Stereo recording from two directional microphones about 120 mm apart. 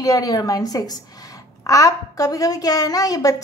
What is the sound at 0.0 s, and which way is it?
A woman's voice, 30° left (ahead or behind).